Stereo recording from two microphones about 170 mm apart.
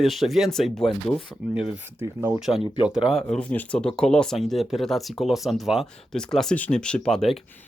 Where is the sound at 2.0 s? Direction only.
15° right (ahead or behind).